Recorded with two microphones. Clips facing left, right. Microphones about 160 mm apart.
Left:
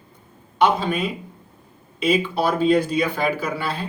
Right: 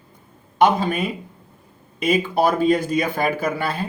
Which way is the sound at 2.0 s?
50° right (ahead or behind).